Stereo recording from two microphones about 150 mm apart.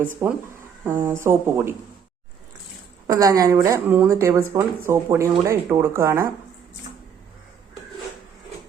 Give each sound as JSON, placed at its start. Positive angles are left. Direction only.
{"t": 0.0, "sound": "speech", "side_deg": -10}
{"t": 3.1, "sound": "speech", "side_deg": -25}